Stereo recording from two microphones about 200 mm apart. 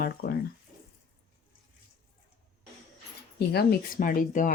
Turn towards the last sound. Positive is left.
turn(degrees=40)  # may be behind; listen again after turning